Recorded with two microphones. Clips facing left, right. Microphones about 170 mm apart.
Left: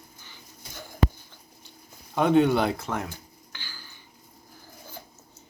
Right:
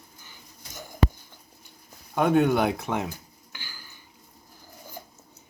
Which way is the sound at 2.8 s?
20° right (ahead or behind).